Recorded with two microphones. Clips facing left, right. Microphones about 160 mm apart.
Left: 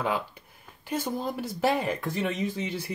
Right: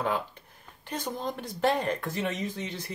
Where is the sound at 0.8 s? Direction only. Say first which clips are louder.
Left 3 dB; 5° left (ahead or behind).